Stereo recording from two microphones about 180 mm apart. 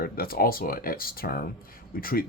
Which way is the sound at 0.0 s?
55° left (ahead or behind).